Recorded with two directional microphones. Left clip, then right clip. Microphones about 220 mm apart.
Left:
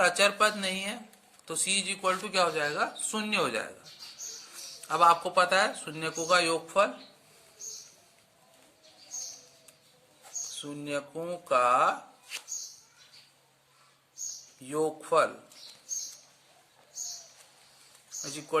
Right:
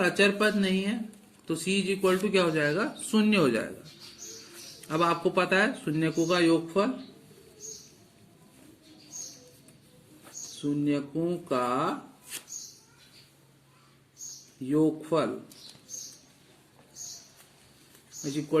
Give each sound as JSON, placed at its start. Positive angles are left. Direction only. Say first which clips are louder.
{"t": 0.0, "sound": "speech", "louder": "even", "side_deg": 25}
{"t": 4.9, "sound": "speech", "louder": "left 3 dB", "side_deg": 20}
{"t": 10.6, "sound": "speech", "louder": "right 7 dB", "side_deg": 30}
{"t": 14.6, "sound": "speech", "louder": "right 4 dB", "side_deg": 30}
{"t": 18.2, "sound": "speech", "louder": "right 3 dB", "side_deg": 30}